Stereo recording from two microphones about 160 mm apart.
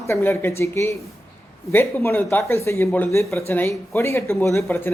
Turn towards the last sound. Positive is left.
turn(degrees=15)  # may be behind; listen again after turning